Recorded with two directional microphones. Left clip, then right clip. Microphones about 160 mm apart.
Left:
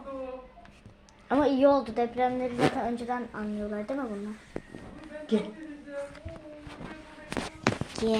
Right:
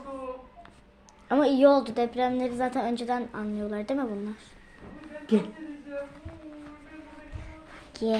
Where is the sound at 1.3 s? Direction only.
10° right (ahead or behind); by 4.1 s 30° right (ahead or behind).